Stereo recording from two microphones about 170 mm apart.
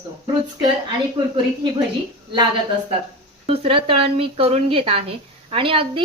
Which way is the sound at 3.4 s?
35° right (ahead or behind).